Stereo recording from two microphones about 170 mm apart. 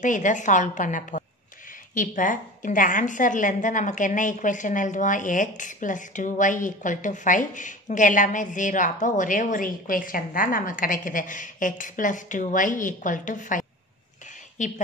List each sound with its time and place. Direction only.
0.0 s a woman's voice: 50° left (ahead or behind)